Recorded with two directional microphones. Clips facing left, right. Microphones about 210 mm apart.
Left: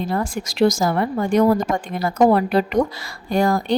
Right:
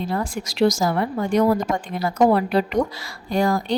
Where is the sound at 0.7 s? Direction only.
50° left (ahead or behind).